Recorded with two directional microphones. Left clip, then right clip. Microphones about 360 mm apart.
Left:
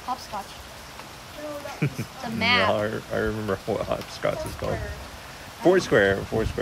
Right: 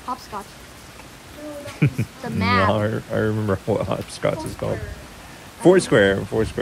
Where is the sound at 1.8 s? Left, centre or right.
Centre.